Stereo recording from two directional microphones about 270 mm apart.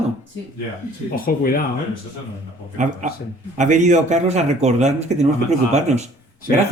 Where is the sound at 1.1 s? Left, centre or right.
Left.